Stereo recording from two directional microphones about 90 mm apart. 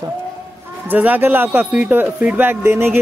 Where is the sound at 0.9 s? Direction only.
20° right (ahead or behind).